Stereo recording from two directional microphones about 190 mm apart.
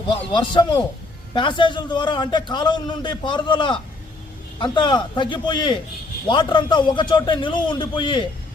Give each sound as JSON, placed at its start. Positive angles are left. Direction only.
{"t": 0.3, "sound": "a man's voice", "side_deg": 25}